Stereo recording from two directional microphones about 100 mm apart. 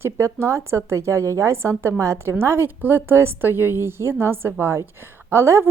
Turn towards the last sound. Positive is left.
turn(degrees=-25)  # may be behind; listen again after turning